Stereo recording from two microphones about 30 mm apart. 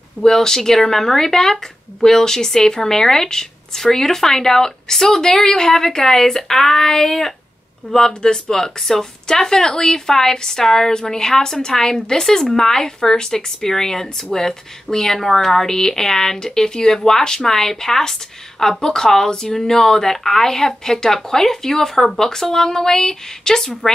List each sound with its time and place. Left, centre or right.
0.3 s speech: centre
10.9 s speech: left